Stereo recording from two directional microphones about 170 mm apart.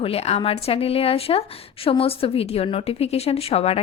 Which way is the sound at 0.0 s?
35° left (ahead or behind).